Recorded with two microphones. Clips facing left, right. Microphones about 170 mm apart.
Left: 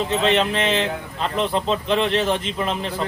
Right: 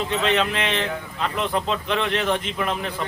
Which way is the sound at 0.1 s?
30° left (ahead or behind).